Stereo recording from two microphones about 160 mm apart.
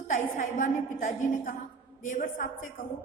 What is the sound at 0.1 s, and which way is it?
A woman's voice, 55° left (ahead or behind).